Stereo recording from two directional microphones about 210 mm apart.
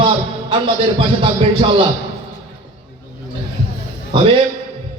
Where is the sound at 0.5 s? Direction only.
25° right (ahead or behind).